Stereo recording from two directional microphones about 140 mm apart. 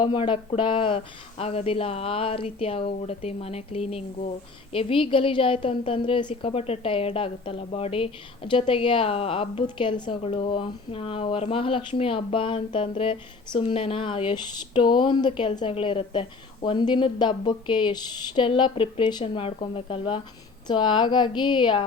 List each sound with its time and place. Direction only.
0.0 s speech: 35° left (ahead or behind)